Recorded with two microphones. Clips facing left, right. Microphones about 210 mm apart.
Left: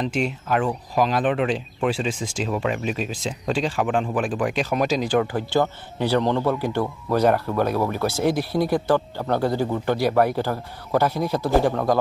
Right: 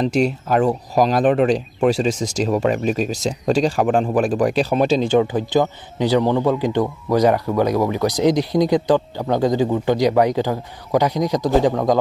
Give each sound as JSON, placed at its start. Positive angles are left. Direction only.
{"t": 0.0, "sound": "speech", "side_deg": -40}